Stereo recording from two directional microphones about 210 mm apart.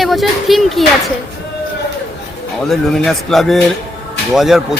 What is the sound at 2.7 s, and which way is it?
A man's voice, centre (ahead or behind).